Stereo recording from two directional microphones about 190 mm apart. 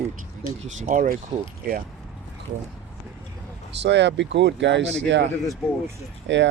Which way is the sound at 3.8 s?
70° right (ahead or behind).